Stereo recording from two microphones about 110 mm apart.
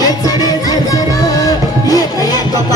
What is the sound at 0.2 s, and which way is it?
Music, 35° left (ahead or behind).